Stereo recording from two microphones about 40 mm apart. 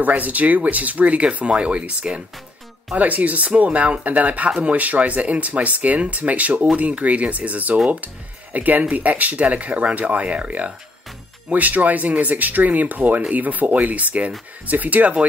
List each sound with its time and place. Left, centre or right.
0.0 s speech: right
10.2 s speech: right
11.5 s speech: right